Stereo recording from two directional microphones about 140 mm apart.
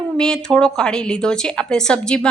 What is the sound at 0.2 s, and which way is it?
A woman's voice, 5° left (ahead or behind).